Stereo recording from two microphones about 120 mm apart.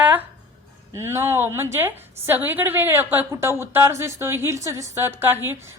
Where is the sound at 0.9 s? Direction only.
20° right (ahead or behind).